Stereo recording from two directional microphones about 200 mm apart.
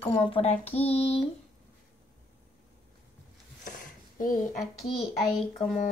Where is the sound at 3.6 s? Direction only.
45° left (ahead or behind).